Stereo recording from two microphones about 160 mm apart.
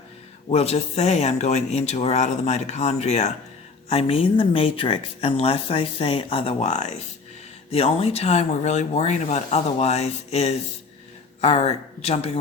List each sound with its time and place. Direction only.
0.5 s speech: 40° left (ahead or behind)